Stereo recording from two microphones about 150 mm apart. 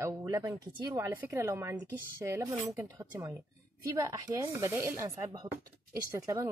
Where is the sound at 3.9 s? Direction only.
20° right (ahead or behind).